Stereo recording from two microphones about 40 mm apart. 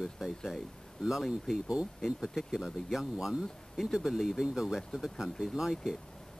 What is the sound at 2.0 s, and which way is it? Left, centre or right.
Speech, centre.